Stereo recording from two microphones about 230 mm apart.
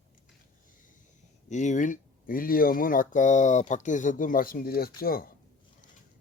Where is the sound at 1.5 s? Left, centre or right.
Left.